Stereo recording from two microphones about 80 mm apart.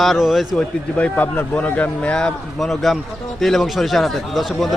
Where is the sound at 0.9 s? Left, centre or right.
Centre.